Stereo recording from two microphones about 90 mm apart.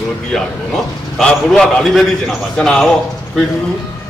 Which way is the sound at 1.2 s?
5° left (ahead or behind).